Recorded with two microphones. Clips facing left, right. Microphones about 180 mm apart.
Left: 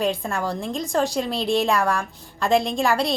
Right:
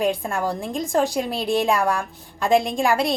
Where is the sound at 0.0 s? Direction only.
15° right (ahead or behind).